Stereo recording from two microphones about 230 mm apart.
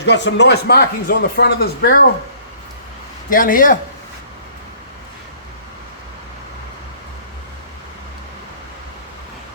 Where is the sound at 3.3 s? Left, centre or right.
Left.